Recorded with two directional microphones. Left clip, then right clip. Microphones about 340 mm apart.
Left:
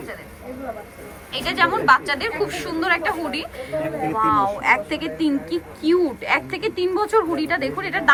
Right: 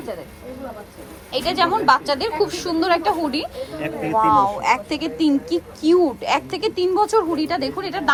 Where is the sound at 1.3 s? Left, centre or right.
Centre.